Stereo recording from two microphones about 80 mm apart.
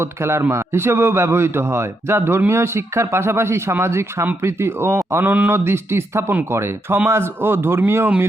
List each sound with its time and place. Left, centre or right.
0.0 s a man's voice: right
5.2 s a man's voice: right
5.5 s a man's voice: right